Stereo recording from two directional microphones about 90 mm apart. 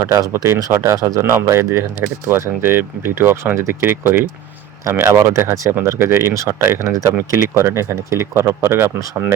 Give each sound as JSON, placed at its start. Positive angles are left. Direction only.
{"t": 0.0, "sound": "speech", "side_deg": -40}